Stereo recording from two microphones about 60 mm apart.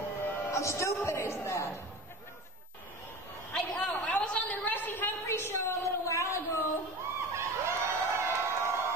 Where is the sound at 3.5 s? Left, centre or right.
Centre; by 5.1 s left.